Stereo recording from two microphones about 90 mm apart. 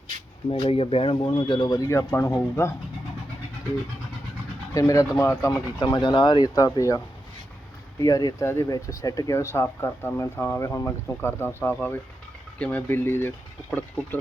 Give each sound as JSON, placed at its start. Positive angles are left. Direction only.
{"t": 0.6, "sound": "speech", "side_deg": 90}
{"t": 1.3, "sound": "speech", "side_deg": 65}
{"t": 1.9, "sound": "speech", "side_deg": 35}
{"t": 4.7, "sound": "speech", "side_deg": 40}
{"t": 5.8, "sound": "speech", "side_deg": 55}
{"t": 6.7, "sound": "speech", "side_deg": 40}